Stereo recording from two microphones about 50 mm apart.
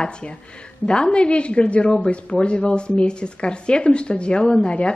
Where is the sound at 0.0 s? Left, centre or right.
Centre.